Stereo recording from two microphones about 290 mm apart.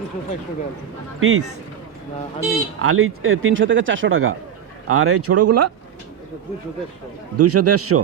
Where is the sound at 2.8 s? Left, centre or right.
Right.